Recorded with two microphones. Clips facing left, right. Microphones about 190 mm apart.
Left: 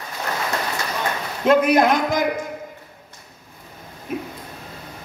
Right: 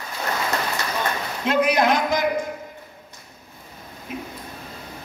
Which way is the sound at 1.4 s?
50° left (ahead or behind).